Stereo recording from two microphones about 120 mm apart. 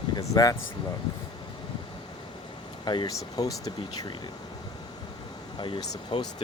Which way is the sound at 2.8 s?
35° left (ahead or behind).